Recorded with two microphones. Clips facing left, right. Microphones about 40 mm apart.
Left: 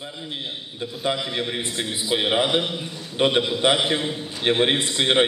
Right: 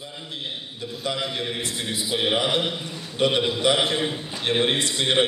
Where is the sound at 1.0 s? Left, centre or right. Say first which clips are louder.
Left 2 dB; left.